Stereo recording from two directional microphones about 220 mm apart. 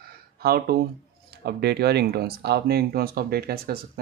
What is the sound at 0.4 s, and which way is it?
Speech, 45° right (ahead or behind).